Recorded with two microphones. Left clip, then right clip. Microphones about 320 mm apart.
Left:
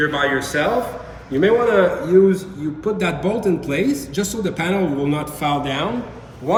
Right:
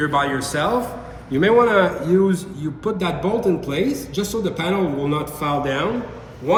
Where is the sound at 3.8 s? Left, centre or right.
Centre.